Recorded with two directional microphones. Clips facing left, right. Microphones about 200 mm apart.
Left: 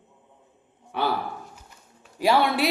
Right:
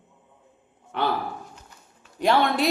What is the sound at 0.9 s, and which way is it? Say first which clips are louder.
Speech: even; 10° left (ahead or behind).